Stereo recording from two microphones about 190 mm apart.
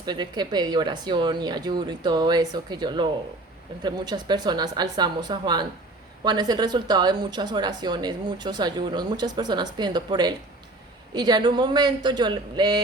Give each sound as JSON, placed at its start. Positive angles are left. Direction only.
{"t": 0.0, "sound": "speech", "side_deg": -20}